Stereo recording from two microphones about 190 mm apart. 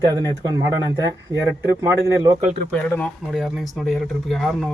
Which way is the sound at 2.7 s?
10° left (ahead or behind).